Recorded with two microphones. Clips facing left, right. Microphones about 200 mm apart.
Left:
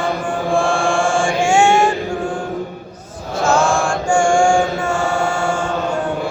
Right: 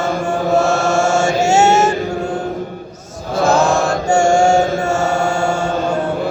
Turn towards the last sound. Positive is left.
turn(degrees=-40)  # may be behind; listen again after turning